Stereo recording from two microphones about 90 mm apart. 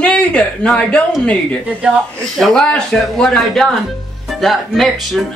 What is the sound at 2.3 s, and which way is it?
Speech, 5° left (ahead or behind).